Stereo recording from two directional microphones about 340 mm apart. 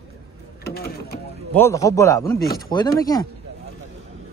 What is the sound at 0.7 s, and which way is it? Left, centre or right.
Sewing machine, left.